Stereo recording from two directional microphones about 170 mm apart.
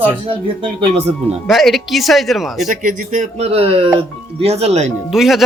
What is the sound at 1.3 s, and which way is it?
Speech, centre (ahead or behind).